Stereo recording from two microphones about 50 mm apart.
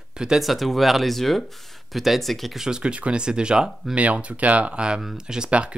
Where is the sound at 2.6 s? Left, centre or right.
Centre.